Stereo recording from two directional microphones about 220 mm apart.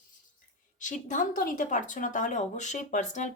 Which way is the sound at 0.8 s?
35° left (ahead or behind).